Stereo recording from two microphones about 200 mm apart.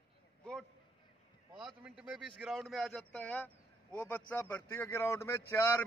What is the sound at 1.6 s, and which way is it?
A man's voice, 5° right (ahead or behind).